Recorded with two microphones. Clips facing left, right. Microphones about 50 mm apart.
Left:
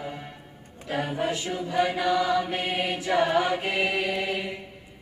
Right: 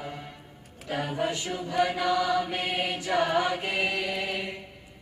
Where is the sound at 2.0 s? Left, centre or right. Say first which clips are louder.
Left 2 dB; left.